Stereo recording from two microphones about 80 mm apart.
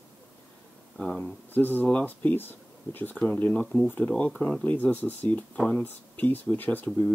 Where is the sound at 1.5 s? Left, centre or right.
Left.